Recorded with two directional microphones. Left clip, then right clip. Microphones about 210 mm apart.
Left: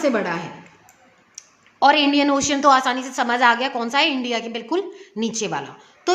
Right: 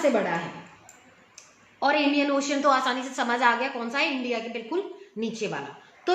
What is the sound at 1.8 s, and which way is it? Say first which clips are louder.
A woman's voice: left 7 dB; 40° left (ahead or behind).